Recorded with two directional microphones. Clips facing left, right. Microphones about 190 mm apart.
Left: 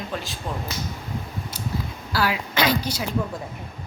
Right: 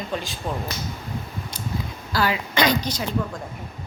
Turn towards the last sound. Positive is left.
turn(degrees=5)  # may be behind; listen again after turning